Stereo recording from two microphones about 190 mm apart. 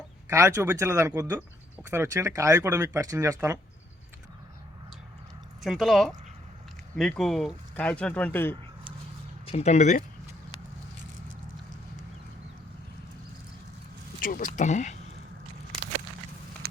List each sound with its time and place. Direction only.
0.3 s speech: 15° right (ahead or behind)
5.6 s speech: centre (ahead or behind)
9.5 s speech: 35° left (ahead or behind)
14.2 s speech: 45° left (ahead or behind)